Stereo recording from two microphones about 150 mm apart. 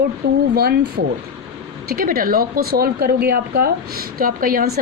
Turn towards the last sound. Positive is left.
turn(degrees=-70)  # may be behind; listen again after turning